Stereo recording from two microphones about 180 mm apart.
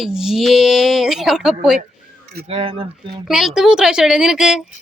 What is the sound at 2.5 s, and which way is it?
Speech, 30° right (ahead or behind).